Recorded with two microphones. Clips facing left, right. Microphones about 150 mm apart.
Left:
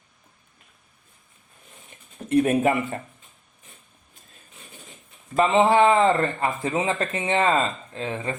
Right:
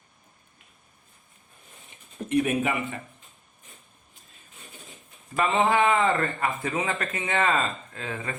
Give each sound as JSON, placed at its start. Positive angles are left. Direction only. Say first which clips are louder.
{"t": 2.3, "sound": "speech", "louder": "left 5 dB", "side_deg": 45}
{"t": 5.4, "sound": "speech", "louder": "left 5 dB", "side_deg": 30}